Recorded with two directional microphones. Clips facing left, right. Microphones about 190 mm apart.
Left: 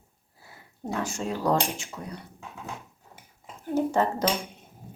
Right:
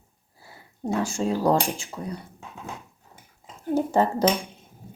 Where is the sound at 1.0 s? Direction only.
30° right (ahead or behind).